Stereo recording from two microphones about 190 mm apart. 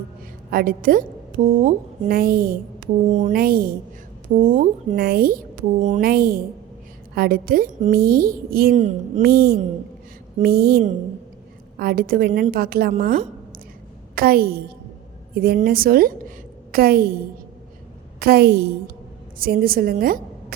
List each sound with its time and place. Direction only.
0.5 s a woman's voice: 50° right (ahead or behind)
3.4 s a woman's voice: 50° right (ahead or behind)
8.7 s a woman's voice: 35° right (ahead or behind)
9.2 s a woman's voice: 55° right (ahead or behind)
18.2 s a woman's voice: 55° right (ahead or behind)